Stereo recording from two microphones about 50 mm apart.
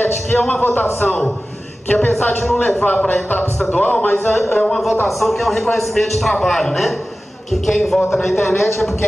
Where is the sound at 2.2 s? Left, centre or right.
Left.